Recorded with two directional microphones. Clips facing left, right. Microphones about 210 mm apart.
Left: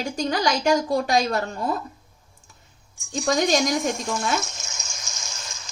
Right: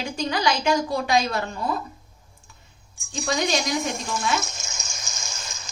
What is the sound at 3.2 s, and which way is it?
A woman's voice, 45° left (ahead or behind).